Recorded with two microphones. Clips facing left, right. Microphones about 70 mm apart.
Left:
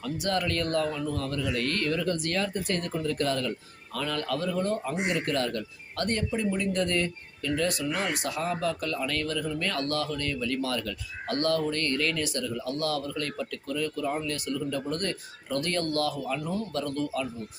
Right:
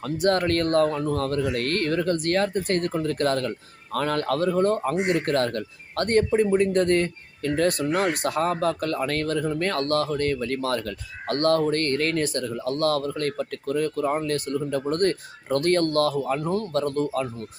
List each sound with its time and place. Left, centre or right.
0.0 s speech: right